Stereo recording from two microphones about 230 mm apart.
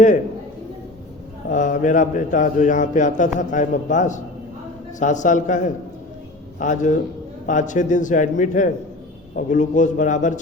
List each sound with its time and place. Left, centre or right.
1.5 s a man's voice: left